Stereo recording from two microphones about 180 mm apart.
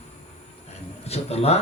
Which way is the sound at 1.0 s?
35° left (ahead or behind).